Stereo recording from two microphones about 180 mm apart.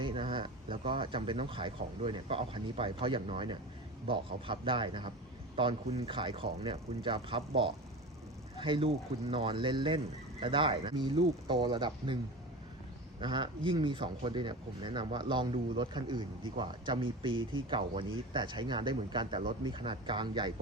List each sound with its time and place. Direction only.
0.0 s speech: 30° right (ahead or behind)